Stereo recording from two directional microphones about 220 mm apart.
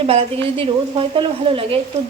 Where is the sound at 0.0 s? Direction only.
25° right (ahead or behind).